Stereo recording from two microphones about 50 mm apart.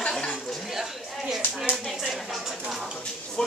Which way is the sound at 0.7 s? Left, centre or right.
Centre.